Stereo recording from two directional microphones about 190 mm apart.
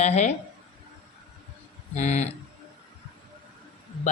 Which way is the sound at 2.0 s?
35° left (ahead or behind).